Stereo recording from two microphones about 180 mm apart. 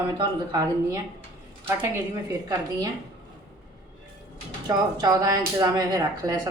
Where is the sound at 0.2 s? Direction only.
20° right (ahead or behind).